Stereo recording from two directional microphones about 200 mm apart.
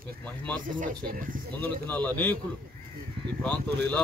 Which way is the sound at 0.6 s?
40° right (ahead or behind).